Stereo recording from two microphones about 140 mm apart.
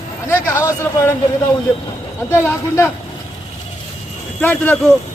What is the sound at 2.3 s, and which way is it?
Speech, 20° left (ahead or behind).